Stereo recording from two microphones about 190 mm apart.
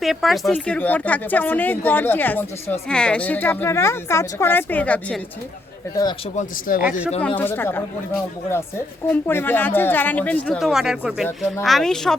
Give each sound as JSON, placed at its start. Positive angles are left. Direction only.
{"t": 0.0, "sound": "speech", "side_deg": 0}
{"t": 5.9, "sound": "speech", "side_deg": 20}
{"t": 6.3, "sound": "speech", "side_deg": 45}
{"t": 7.2, "sound": "speech", "side_deg": 10}